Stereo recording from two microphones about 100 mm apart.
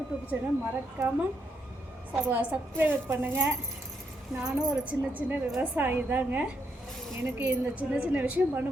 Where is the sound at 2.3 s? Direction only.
15° right (ahead or behind).